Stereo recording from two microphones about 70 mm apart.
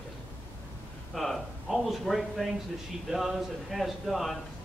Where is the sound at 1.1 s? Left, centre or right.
Centre.